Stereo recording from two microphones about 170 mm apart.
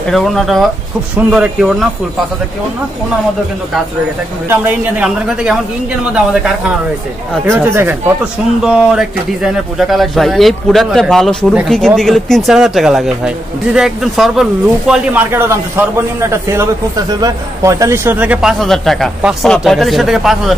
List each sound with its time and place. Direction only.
0.1 s speech: centre (ahead or behind)
4.5 s speech: 10° right (ahead or behind)
7.6 s speech: 10° right (ahead or behind)